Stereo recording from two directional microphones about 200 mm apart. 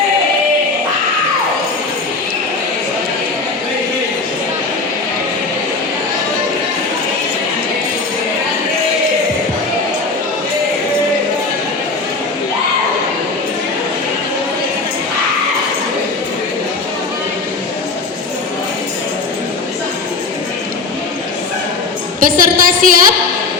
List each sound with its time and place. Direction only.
22.2 s a woman's voice: 45° right (ahead or behind)